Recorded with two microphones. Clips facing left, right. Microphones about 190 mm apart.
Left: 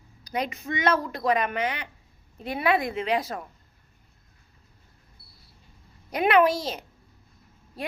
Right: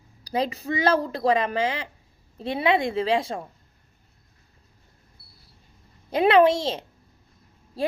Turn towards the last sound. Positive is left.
turn(degrees=-30)  # may be behind; listen again after turning